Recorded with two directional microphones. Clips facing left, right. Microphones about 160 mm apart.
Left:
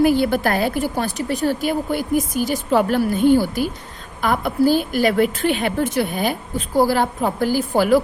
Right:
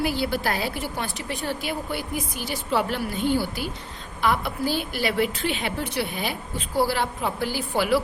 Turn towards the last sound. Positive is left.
turn(degrees=45)  # may be behind; listen again after turning